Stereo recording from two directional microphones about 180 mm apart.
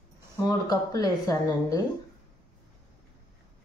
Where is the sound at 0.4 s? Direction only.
20° left (ahead or behind).